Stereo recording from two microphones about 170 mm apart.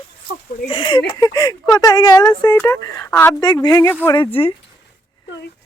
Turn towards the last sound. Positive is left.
turn(degrees=30)  # may be behind; listen again after turning